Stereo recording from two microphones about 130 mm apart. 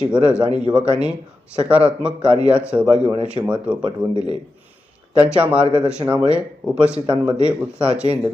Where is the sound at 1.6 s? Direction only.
10° right (ahead or behind).